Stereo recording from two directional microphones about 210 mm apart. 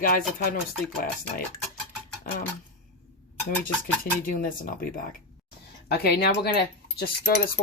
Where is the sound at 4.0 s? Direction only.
40° left (ahead or behind).